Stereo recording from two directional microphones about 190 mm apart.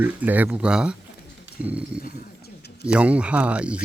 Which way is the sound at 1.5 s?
70° right (ahead or behind).